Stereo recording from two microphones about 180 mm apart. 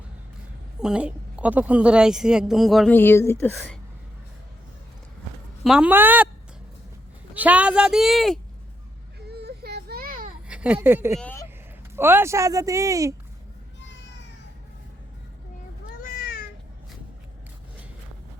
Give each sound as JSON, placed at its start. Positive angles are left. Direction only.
{"t": 0.8, "sound": "a woman's voice", "side_deg": -5}
{"t": 2.9, "sound": "speech", "side_deg": 10}
{"t": 5.6, "sound": "speech", "side_deg": -5}
{"t": 7.3, "sound": "a woman's voice", "side_deg": -10}
{"t": 9.3, "sound": "a sound", "side_deg": -65}
{"t": 10.5, "sound": "speech", "side_deg": -5}
{"t": 11.2, "sound": "speech", "side_deg": 10}
{"t": 11.9, "sound": "speech", "side_deg": -15}
{"t": 14.0, "sound": "cat", "side_deg": 75}
{"t": 16.0, "sound": "cat", "side_deg": 55}